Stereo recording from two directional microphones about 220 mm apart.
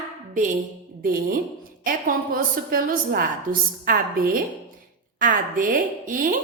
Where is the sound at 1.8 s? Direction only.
40° right (ahead or behind).